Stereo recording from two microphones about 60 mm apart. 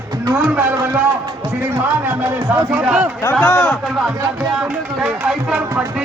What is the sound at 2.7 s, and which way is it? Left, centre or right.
Speech, centre.